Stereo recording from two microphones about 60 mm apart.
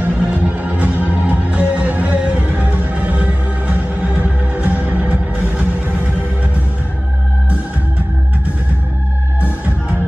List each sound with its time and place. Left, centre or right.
0.0 s music: right